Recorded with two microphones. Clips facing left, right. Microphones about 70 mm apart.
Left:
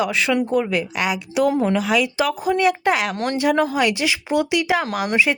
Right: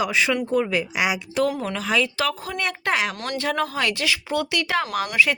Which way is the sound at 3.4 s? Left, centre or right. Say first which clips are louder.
Left 6 dB; centre.